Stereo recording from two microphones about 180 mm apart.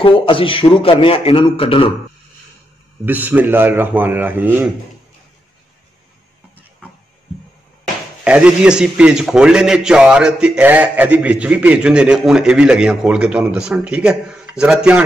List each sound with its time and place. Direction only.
0.0 s a man's voice: 30° left (ahead or behind)
3.1 s speech: 10° right (ahead or behind)
8.2 s a man's voice: 5° right (ahead or behind)